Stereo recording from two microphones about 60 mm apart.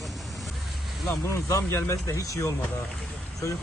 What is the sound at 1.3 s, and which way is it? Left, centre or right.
Speech, left.